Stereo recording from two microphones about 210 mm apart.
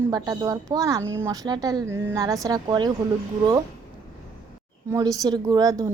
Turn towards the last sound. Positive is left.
turn(degrees=-15)  # may be behind; listen again after turning